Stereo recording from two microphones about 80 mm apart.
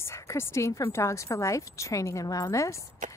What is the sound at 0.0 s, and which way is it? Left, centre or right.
A woman's voice, left.